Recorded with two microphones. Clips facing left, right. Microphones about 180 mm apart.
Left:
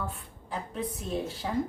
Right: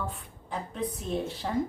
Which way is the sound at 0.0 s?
Centre (ahead or behind).